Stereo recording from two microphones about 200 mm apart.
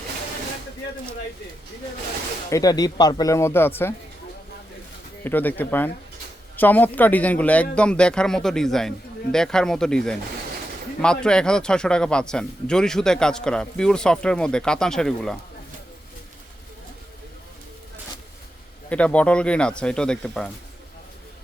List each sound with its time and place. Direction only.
2.5 s speech: 20° left (ahead or behind)
5.2 s speech: 10° left (ahead or behind)
18.9 s speech: 5° left (ahead or behind)